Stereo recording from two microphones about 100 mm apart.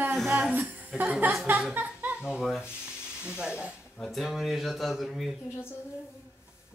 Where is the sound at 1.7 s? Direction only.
10° right (ahead or behind).